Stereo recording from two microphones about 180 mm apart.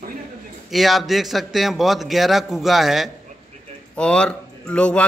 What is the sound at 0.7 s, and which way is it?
A man's voice, centre (ahead or behind).